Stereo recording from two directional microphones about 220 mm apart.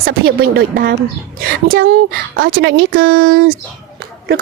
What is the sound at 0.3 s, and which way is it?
Speech, 45° right (ahead or behind).